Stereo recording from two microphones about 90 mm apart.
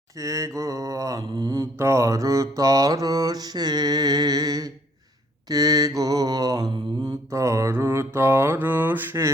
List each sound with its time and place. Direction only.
0.2 s mantra: 35° right (ahead or behind)